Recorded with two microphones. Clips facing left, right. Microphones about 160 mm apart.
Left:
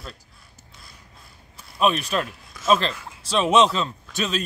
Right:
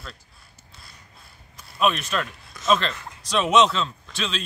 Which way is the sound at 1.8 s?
35° left (ahead or behind).